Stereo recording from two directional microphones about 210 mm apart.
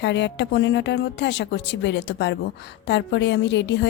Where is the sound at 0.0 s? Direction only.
55° left (ahead or behind).